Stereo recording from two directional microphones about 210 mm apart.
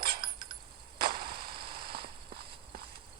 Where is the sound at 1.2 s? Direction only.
45° right (ahead or behind).